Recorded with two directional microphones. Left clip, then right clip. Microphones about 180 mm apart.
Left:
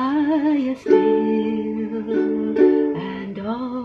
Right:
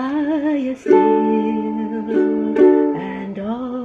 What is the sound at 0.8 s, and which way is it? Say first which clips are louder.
Music: right 3 dB; 30° right (ahead or behind).